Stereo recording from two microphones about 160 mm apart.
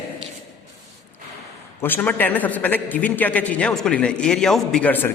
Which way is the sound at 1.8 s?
10° left (ahead or behind).